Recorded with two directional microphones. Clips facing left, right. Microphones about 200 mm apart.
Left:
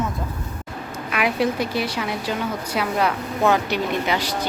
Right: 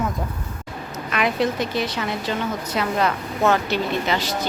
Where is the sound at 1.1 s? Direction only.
10° left (ahead or behind).